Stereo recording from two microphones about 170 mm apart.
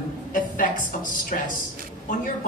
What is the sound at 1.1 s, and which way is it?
Speech, 50° left (ahead or behind).